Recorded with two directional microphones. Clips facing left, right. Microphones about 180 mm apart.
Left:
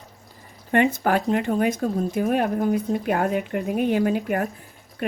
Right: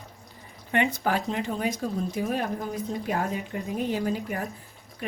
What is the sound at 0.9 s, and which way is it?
Speech, 55° left (ahead or behind).